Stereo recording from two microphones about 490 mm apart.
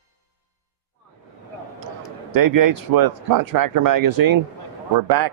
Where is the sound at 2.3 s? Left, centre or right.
Right.